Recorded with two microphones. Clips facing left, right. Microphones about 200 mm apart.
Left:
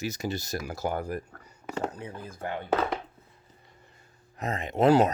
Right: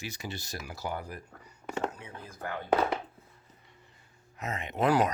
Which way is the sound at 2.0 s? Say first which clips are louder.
Left 4 dB; 25° left (ahead or behind).